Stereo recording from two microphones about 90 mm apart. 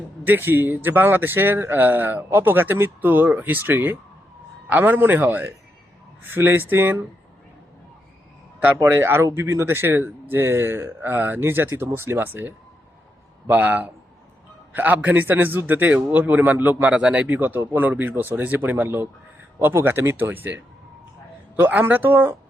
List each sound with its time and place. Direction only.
0.3 s speech: 25° right (ahead or behind)
8.8 s speech: 30° right (ahead or behind)